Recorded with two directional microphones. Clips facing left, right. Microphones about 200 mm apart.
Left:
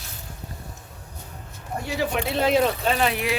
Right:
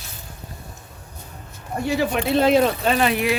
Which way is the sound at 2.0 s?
65° right (ahead or behind).